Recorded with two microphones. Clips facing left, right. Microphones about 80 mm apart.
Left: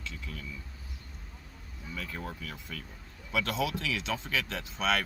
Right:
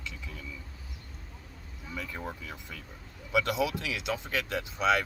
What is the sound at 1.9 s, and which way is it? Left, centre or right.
Speech, centre.